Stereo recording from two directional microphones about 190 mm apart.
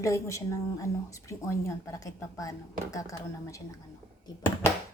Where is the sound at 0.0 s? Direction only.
15° left (ahead or behind).